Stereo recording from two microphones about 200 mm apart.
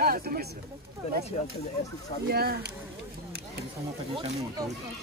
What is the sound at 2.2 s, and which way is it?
Speech, 50° right (ahead or behind).